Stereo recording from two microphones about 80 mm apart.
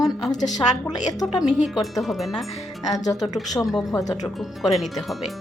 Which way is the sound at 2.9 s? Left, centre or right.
Left.